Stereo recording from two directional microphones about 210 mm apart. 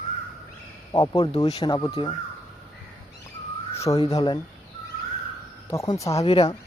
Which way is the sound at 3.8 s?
20° left (ahead or behind).